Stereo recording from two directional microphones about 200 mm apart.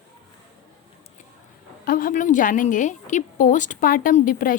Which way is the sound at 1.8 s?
45° left (ahead or behind).